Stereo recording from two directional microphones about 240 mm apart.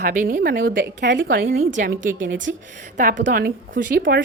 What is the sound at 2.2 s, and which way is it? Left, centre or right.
Speech, right.